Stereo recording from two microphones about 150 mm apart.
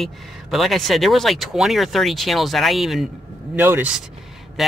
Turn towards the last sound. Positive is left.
turn(degrees=0)  # may be behind; listen again after turning